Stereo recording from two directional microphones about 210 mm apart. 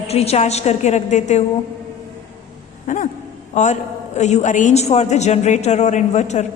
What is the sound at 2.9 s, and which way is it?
A woman's voice, 40° left (ahead or behind).